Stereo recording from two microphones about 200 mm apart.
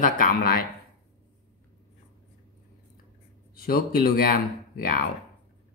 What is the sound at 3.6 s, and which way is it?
Speech, 50° left (ahead or behind).